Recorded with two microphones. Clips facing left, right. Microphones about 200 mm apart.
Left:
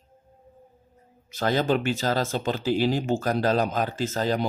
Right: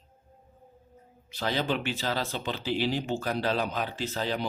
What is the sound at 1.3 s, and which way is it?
Speech, 45° left (ahead or behind).